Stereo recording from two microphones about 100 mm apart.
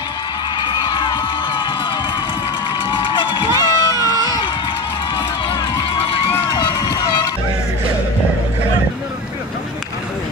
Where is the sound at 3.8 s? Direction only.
40° left (ahead or behind).